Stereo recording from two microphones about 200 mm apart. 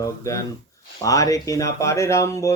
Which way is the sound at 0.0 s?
15° left (ahead or behind).